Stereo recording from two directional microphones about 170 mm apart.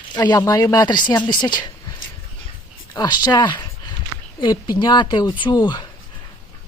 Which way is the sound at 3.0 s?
25° left (ahead or behind).